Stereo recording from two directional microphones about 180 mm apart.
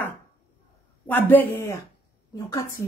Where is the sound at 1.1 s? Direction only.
10° left (ahead or behind).